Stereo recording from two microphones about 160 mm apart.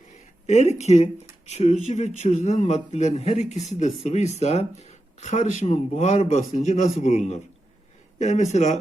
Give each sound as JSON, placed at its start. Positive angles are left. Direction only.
{"t": 0.4, "sound": "speech", "side_deg": 45}